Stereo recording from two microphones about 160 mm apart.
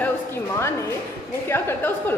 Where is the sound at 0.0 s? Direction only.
15° left (ahead or behind).